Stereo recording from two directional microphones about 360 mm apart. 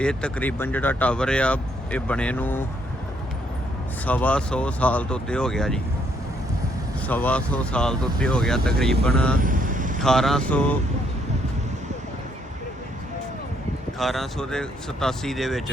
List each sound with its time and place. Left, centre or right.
0.0 s speech: centre
4.0 s speech: centre
7.1 s speech: centre
9.4 s vehicle: right
10.0 s speech: centre
14.0 s speech: centre